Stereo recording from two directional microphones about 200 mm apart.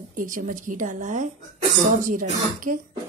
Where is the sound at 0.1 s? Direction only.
40° right (ahead or behind).